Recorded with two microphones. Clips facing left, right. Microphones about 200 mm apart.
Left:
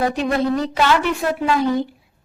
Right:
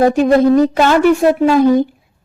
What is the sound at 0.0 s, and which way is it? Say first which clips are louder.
A woman's voice: right 9 dB; 45° right (ahead or behind).